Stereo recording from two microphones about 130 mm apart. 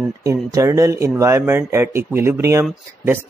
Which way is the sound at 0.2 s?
25° right (ahead or behind).